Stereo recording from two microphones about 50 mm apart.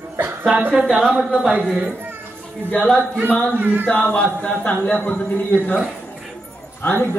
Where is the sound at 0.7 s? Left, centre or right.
Centre.